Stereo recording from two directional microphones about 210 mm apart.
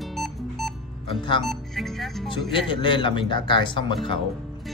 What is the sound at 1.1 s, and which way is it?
Speech, 25° left (ahead or behind).